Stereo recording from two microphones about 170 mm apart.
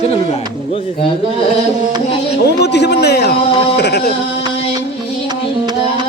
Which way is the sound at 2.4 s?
80° left.